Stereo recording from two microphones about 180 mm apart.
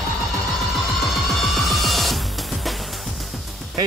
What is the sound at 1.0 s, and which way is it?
Music, centre (ahead or behind).